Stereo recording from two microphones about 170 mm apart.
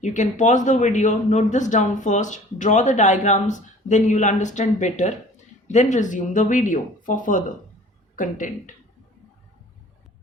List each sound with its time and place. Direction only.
0.0 s a man's voice: 45° left (ahead or behind)